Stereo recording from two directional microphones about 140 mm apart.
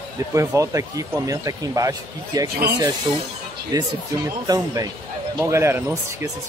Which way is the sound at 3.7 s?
25° right (ahead or behind).